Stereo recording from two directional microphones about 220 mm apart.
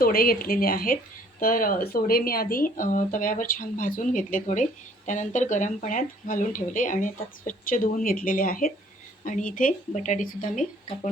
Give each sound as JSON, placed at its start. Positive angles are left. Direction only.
{"t": 0.0, "sound": "speech", "side_deg": 40}